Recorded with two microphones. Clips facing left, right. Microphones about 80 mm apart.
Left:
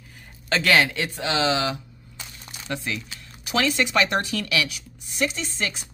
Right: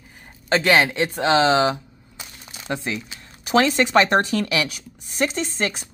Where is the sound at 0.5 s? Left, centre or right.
Right.